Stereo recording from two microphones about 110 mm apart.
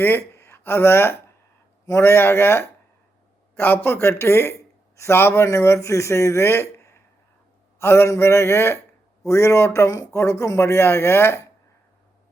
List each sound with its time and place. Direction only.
0.0 s speech: 20° left (ahead or behind)